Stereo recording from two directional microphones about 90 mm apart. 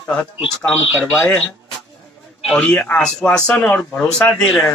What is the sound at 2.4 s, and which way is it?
Speech, 5° left (ahead or behind).